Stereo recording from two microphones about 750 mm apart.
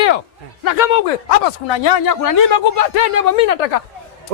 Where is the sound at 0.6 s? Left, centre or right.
Left.